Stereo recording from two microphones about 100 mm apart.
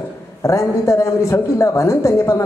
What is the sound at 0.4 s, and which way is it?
A man's voice, 30° left (ahead or behind).